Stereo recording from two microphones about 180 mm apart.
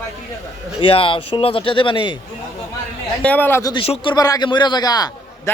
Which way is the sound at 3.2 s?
10° left (ahead or behind).